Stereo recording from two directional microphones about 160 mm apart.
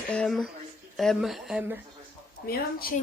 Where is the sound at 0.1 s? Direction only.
5° left (ahead or behind).